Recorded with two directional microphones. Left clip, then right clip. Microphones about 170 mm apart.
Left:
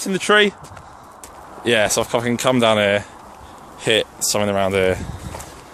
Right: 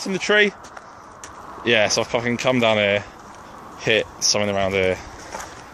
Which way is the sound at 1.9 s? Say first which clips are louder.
Left 2 dB; 35° left (ahead or behind).